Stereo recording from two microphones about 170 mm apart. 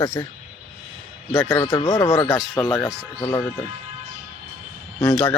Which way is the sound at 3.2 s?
20° left (ahead or behind).